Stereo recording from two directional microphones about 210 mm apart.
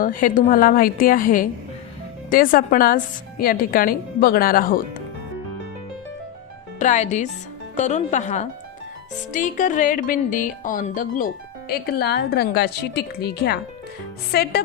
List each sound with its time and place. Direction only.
0.0 s speech: 40° left (ahead or behind)
6.7 s speech: 35° left (ahead or behind)